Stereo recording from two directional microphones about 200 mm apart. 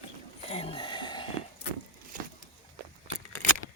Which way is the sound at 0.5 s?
30° left (ahead or behind).